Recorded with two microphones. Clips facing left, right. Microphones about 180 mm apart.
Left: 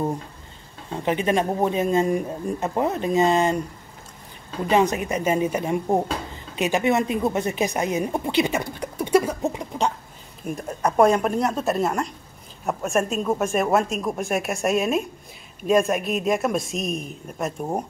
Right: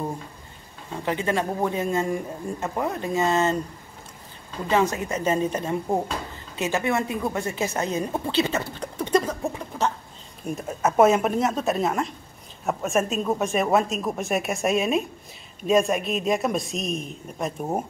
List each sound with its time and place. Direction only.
0.9 s speech: 20° left (ahead or behind)
4.6 s speech: 20° left (ahead or behind)
10.4 s speech: centre (ahead or behind)